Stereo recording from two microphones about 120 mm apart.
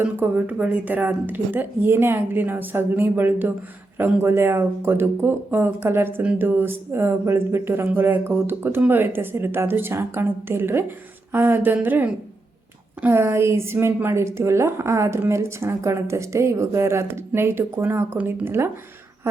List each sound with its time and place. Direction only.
0.0 s speech: 15° right (ahead or behind)